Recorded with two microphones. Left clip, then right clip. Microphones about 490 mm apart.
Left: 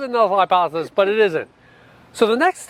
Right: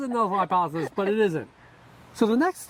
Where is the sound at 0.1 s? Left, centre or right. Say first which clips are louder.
Left 8 dB; left.